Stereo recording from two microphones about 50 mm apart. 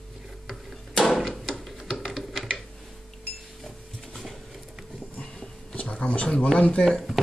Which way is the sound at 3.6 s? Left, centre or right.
Centre.